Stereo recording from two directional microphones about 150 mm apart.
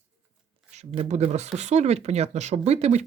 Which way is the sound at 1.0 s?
50° right (ahead or behind).